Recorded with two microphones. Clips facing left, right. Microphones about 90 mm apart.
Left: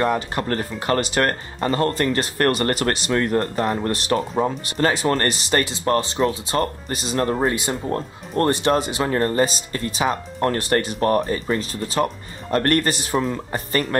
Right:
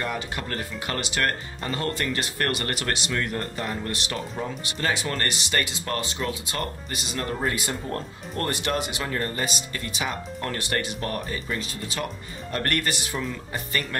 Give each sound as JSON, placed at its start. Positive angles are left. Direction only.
{"t": 0.0, "sound": "speech", "side_deg": 40}